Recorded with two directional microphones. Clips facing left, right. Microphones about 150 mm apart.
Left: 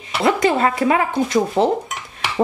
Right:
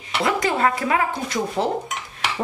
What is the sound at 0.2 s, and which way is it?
A woman's voice, 25° left (ahead or behind).